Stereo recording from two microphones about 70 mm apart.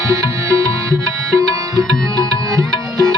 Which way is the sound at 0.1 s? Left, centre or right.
Right.